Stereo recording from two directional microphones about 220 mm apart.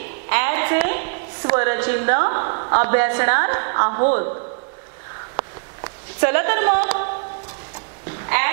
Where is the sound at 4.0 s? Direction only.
35° right (ahead or behind).